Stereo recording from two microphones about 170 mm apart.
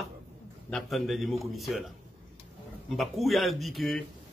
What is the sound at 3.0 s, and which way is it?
A man's voice, centre (ahead or behind).